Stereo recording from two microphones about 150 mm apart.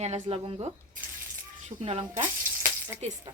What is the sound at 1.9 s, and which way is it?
Speech, 40° right (ahead or behind).